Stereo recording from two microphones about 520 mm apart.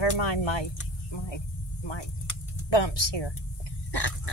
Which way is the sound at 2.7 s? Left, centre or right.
Left.